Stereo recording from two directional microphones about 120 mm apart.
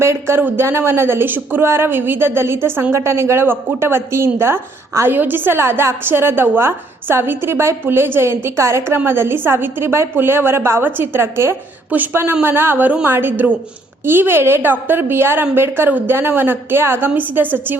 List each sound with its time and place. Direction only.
0.0 s a woman's voice: 20° right (ahead or behind)